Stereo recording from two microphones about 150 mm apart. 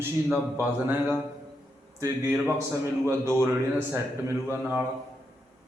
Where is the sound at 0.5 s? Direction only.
15° right (ahead or behind).